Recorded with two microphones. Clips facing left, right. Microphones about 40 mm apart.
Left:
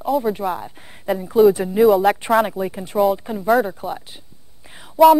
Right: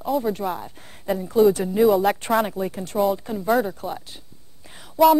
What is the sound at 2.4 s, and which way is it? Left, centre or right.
Speech, centre.